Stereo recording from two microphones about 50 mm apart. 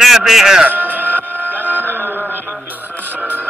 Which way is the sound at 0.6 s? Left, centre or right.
Right.